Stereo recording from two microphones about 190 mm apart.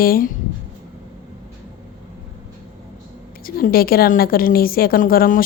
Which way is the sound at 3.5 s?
50° left (ahead or behind).